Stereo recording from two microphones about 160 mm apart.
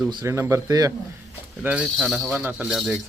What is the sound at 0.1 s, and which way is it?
Speech, 25° right (ahead or behind).